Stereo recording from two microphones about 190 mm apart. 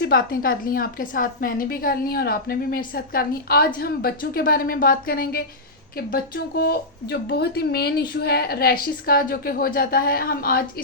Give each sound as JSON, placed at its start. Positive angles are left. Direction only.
{"t": 0.0, "sound": "a woman's voice", "side_deg": 50}